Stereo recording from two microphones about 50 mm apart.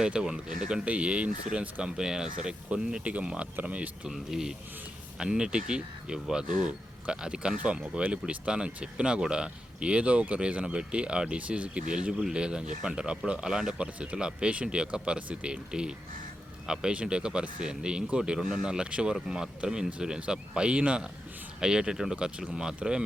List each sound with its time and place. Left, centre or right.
0.0 s speech: centre
0.9 s speech: right
1.8 s speech: centre; by 4.1 s right
4.1 s speech: centre